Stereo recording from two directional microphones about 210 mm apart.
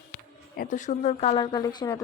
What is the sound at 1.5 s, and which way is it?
Speech, 20° left (ahead or behind).